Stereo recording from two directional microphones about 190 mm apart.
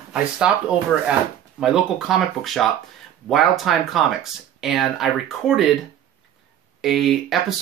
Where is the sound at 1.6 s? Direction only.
Centre (ahead or behind).